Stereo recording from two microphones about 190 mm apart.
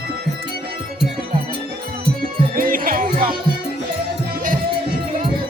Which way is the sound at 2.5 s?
45° right (ahead or behind).